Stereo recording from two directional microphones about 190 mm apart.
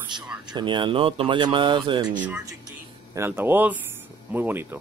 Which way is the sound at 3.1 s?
10° right (ahead or behind).